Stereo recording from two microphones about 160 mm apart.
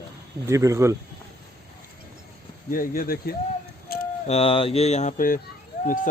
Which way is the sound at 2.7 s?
60° left (ahead or behind).